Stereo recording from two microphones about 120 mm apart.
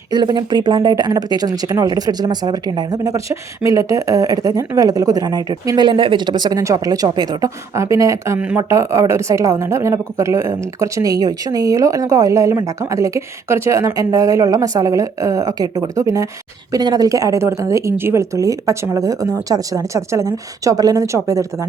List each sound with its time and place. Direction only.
0.1 s a woman's voice: 35° right (ahead or behind)